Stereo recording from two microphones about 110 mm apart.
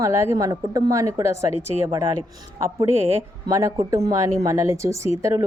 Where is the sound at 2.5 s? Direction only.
25° right (ahead or behind).